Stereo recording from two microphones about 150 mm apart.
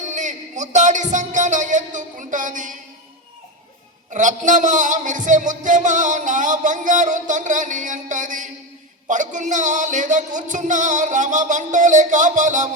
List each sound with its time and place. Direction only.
0.0 s music: 55° right (ahead or behind)
4.1 s speech: 55° right (ahead or behind)